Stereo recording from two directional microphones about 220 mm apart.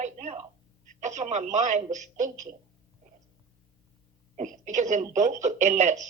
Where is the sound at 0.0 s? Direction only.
30° right (ahead or behind).